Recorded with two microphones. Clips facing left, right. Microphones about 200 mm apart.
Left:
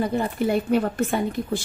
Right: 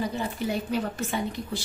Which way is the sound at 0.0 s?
55° left (ahead or behind).